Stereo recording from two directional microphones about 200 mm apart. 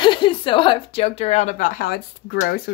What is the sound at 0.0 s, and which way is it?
Speech, 25° left (ahead or behind).